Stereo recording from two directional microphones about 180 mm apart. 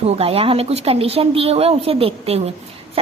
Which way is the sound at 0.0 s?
35° right (ahead or behind).